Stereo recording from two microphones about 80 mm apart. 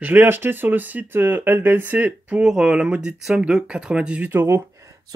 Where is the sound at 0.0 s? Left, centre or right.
Right.